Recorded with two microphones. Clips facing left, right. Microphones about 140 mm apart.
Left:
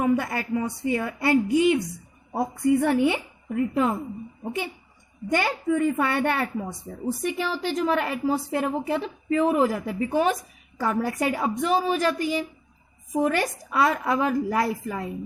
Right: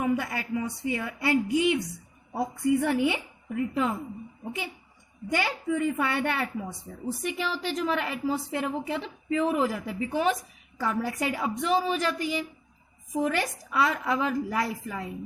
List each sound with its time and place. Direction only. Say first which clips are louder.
0.0 s a woman's voice: left 4 dB; 45° left (ahead or behind)